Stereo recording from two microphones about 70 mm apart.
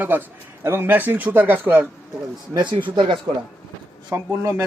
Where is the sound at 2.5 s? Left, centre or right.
Right.